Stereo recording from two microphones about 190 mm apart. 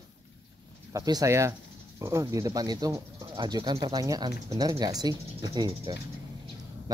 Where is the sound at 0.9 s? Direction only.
20° right (ahead or behind).